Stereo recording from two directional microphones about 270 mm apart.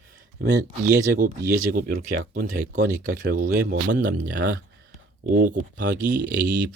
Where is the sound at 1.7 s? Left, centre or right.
Right.